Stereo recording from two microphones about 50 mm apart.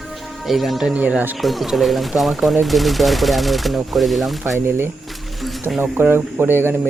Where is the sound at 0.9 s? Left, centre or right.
Right.